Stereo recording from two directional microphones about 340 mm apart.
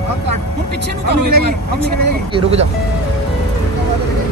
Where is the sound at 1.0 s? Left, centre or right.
Right.